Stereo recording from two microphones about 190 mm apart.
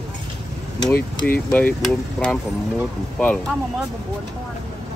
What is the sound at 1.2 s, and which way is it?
Speech, 10° left (ahead or behind).